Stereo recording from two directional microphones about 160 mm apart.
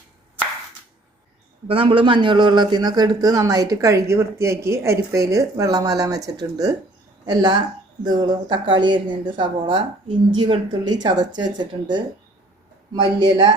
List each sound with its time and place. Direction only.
1.6 s a man's voice: 35° right (ahead or behind)